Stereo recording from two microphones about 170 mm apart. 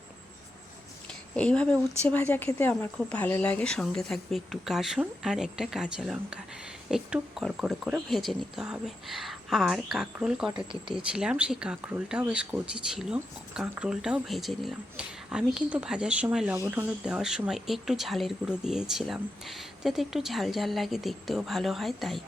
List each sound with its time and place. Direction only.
1.4 s speech: 5° left (ahead or behind)
10.5 s speech: 30° right (ahead or behind)
10.9 s speech: 5° right (ahead or behind)
16.6 s speech: 15° right (ahead or behind); by 22.2 s centre (ahead or behind)